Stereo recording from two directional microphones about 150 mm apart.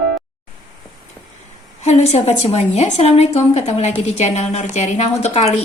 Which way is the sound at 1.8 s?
45° left (ahead or behind).